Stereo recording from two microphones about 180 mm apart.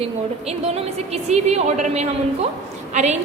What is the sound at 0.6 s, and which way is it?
A woman's voice, 35° right (ahead or behind).